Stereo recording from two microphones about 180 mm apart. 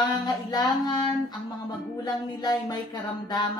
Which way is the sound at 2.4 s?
25° left (ahead or behind).